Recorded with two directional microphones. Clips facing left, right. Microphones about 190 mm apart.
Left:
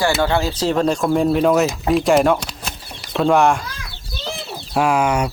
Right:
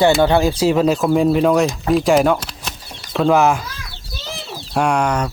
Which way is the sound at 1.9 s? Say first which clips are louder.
Right 1 dB; centre (ahead or behind).